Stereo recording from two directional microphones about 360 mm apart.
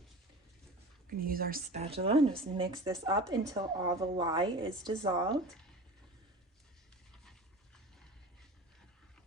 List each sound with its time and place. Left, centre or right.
1.0 s a woman's voice: right